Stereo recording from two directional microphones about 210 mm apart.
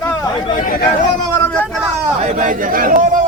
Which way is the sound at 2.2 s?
40° right (ahead or behind).